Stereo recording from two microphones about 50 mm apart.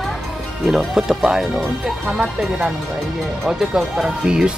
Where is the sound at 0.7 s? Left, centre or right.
Centre.